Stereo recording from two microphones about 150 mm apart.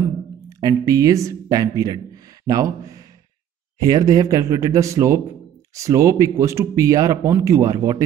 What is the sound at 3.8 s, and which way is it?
Speech, 25° right (ahead or behind).